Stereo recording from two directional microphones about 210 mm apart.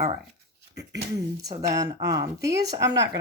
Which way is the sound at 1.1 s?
15° right (ahead or behind).